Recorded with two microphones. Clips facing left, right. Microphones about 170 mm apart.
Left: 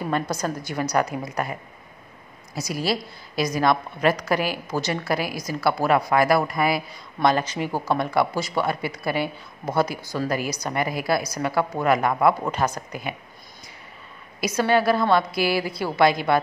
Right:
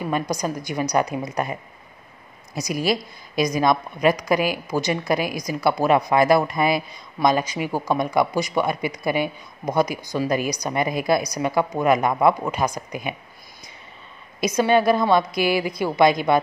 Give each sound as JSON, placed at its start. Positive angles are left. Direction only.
{"t": 0.1, "sound": "speech", "side_deg": -15}
{"t": 14.4, "sound": "speech", "side_deg": -20}